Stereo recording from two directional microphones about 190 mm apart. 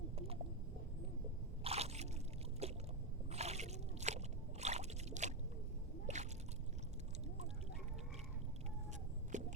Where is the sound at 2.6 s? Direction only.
35° right (ahead or behind).